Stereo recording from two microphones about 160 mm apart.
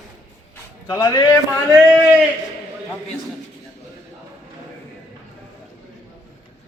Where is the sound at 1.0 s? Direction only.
30° left (ahead or behind).